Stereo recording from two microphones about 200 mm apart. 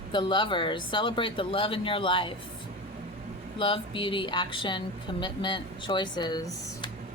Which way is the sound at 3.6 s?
25° left (ahead or behind).